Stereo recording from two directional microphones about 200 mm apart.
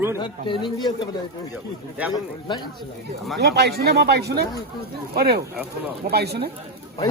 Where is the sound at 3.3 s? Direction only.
55° right (ahead or behind).